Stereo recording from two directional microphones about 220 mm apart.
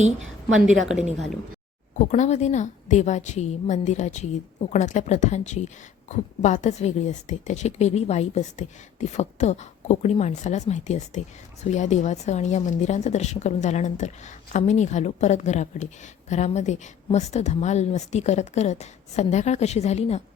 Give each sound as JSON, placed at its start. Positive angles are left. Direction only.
{"t": 0.5, "sound": "a woman's voice", "side_deg": -5}
{"t": 2.0, "sound": "a woman's voice", "side_deg": 35}